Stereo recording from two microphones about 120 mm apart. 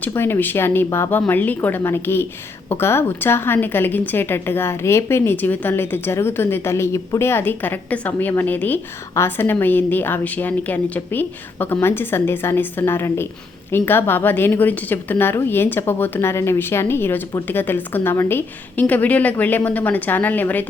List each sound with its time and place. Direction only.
0.1 s a woman's voice: 20° left (ahead or behind)